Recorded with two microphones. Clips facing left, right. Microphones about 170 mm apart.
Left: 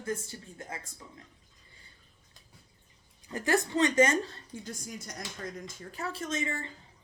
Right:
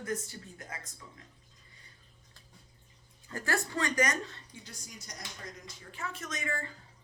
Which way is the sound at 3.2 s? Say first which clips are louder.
Left 5 dB; 20° left (ahead or behind).